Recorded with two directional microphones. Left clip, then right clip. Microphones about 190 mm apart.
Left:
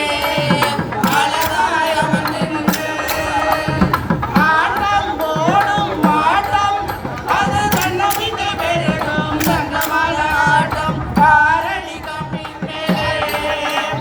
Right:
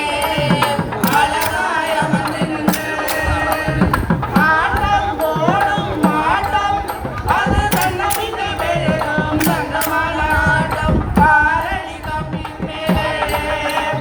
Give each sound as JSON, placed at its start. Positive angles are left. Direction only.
{"t": 0.0, "sound": "music", "side_deg": 55}
{"t": 4.4, "sound": "a sound", "side_deg": 55}
{"t": 5.4, "sound": "music", "side_deg": 55}